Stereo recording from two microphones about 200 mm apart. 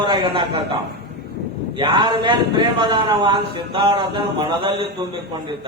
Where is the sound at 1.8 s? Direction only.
20° right (ahead or behind).